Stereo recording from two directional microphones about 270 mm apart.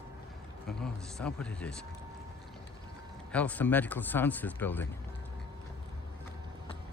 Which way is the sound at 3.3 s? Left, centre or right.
Centre.